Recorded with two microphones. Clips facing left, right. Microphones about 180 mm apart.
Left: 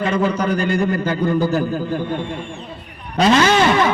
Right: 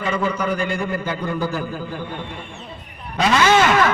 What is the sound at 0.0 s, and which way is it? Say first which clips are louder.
A man's voice: left 4 dB; 40° left (ahead or behind).